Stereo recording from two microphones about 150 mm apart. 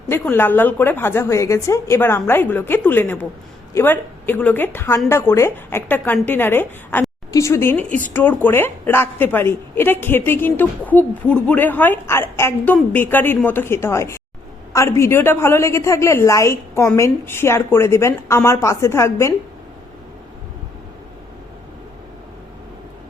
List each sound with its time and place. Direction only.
0.1 s a woman's voice: 15° left (ahead or behind)